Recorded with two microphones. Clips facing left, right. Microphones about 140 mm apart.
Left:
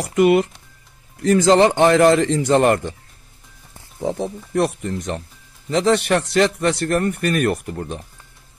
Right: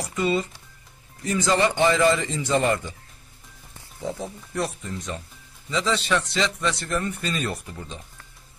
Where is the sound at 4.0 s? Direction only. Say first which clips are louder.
Left 8 dB; 75° left (ahead or behind).